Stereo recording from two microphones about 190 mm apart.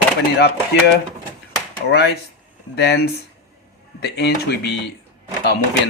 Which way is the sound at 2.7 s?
60° left (ahead or behind).